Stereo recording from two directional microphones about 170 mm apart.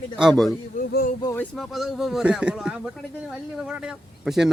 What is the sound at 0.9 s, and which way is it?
Speech, 60° left (ahead or behind).